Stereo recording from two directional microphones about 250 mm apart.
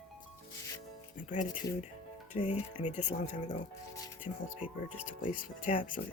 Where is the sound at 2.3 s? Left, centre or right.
Left.